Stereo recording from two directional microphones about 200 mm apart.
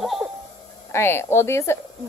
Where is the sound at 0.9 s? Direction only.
10° left (ahead or behind).